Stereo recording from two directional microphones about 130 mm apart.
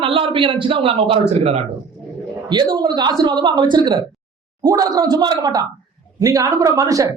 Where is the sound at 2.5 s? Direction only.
35° right (ahead or behind).